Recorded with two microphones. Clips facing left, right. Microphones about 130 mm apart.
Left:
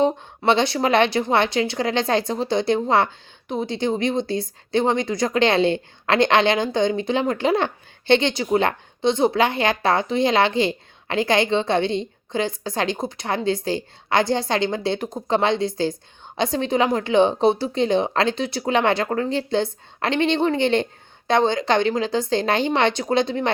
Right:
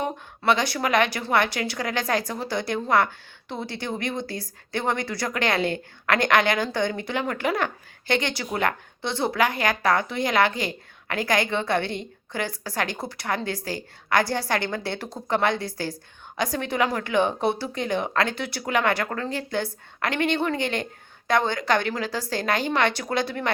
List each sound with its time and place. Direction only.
0.0 s speech: 25° left (ahead or behind)